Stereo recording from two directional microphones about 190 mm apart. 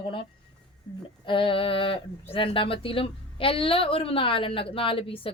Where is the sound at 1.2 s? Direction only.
25° left (ahead or behind).